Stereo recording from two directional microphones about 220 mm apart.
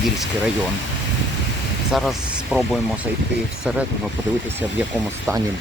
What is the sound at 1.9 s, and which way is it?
Speech, centre (ahead or behind).